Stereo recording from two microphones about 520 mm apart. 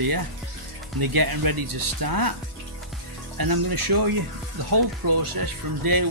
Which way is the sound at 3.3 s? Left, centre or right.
Right.